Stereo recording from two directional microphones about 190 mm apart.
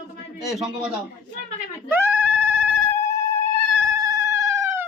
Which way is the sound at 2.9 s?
15° left (ahead or behind).